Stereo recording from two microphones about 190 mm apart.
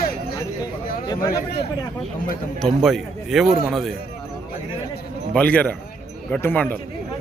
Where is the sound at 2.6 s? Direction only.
Centre (ahead or behind).